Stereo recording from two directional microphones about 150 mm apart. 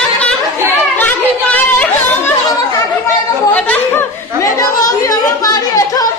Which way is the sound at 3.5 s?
10° left (ahead or behind).